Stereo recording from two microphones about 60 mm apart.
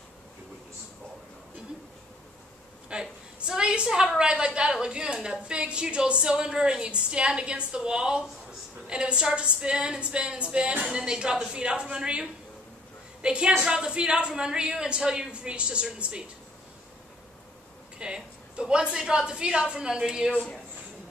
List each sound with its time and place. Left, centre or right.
2.9 s a woman's voice: centre
17.9 s a woman's voice: centre